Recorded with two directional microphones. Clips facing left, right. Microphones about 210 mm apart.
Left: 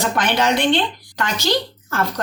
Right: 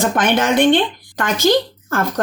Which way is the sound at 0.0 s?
50° right (ahead or behind).